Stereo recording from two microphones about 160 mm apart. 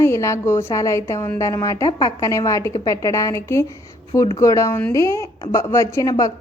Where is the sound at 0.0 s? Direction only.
15° left (ahead or behind).